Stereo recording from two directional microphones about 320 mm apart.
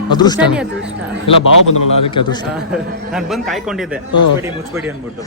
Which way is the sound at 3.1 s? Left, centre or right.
Centre.